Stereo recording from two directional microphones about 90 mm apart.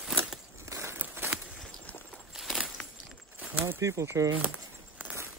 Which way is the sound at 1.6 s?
5° left (ahead or behind).